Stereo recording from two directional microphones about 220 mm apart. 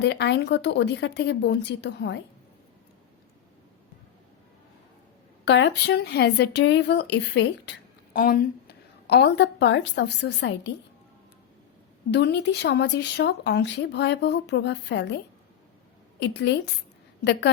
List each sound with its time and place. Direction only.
0.0 s speech: 50° left (ahead or behind)
5.5 s speech: 55° left (ahead or behind)
12.1 s speech: 50° left (ahead or behind)
16.2 s speech: 50° left (ahead or behind)